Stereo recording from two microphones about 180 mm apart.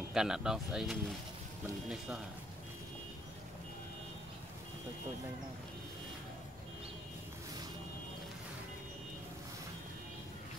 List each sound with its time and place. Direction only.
0.1 s speech: 5° right (ahead or behind)